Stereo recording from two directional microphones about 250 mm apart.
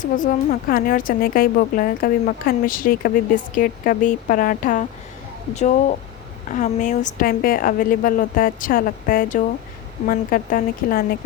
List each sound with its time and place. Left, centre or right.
0.0 s a woman's voice: left
6.5 s a woman's voice: left